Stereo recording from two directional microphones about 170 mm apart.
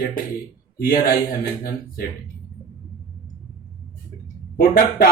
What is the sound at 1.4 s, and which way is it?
Speech, 65° left (ahead or behind).